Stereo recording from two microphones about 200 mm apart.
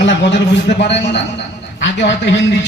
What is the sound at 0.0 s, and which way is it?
A man's voice, 60° left (ahead or behind).